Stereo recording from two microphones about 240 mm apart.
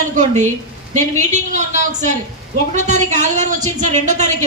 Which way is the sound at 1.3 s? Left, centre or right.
Right.